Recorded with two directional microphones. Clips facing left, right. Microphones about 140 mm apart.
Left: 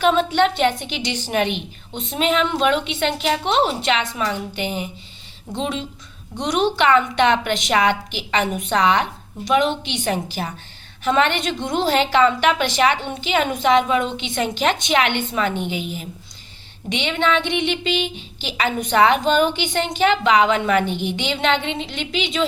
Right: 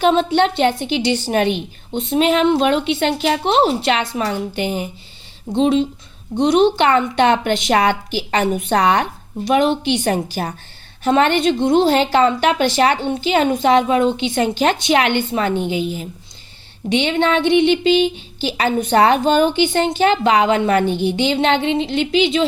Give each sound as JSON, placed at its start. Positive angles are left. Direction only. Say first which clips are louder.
{"t": 0.0, "sound": "a woman's voice", "louder": "right 2 dB", "side_deg": -30}